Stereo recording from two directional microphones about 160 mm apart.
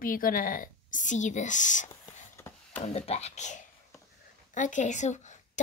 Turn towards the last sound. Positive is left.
turn(degrees=50)  # may be behind; listen again after turning